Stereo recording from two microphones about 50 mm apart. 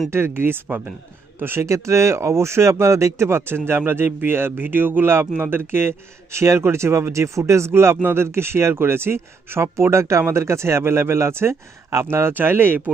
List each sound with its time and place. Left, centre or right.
0.1 s speech: right
1.6 s speech: right
3.2 s speech: right
6.3 s speech: right
7.7 s speech: right
12.4 s speech: right